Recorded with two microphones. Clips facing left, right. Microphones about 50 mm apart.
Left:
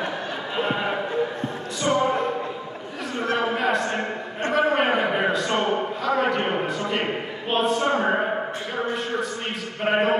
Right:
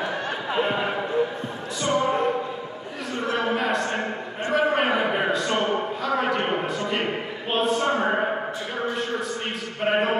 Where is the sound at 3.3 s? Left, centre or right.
Centre.